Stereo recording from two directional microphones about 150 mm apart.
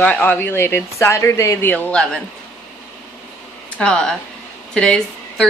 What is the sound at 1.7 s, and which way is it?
Speech, 5° left (ahead or behind).